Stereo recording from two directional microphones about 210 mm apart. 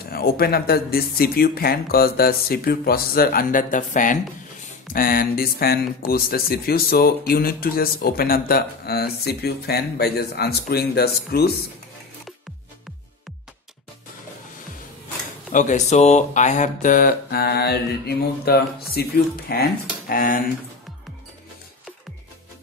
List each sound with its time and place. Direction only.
0.0 s speech: 45° left (ahead or behind)
15.5 s speech: 35° left (ahead or behind)